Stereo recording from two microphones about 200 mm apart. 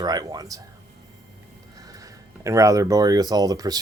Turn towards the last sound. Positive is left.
turn(degrees=-20)  # may be behind; listen again after turning